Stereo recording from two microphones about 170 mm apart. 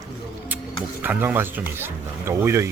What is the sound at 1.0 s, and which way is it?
Speech, 10° right (ahead or behind).